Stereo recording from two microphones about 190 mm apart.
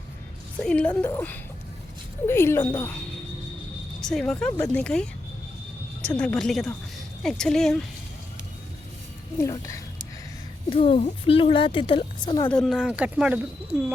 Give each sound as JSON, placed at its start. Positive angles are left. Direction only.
{"t": 0.6, "sound": "a woman's voice", "side_deg": 5}
{"t": 4.0, "sound": "speech", "side_deg": 5}
{"t": 9.4, "sound": "a woman's voice", "side_deg": 15}
{"t": 10.7, "sound": "a woman's voice", "side_deg": 30}
{"t": 12.5, "sound": "speech", "side_deg": 0}